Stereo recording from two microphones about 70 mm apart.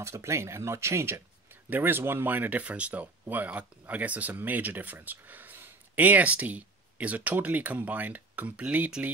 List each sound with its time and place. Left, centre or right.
0.0 s speech: right